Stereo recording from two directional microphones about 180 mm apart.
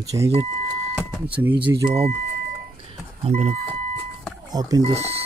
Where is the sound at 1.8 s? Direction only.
35° right (ahead or behind).